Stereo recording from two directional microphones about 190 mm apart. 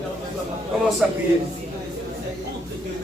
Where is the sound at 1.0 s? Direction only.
5° right (ahead or behind).